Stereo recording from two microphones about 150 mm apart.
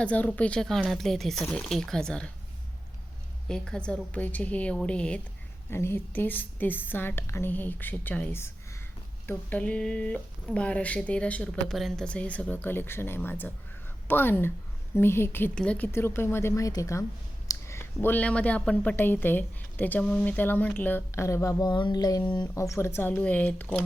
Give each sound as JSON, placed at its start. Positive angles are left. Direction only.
{"t": 0.0, "sound": "a woman's voice", "side_deg": 10}
{"t": 3.5, "sound": "a woman's voice", "side_deg": 5}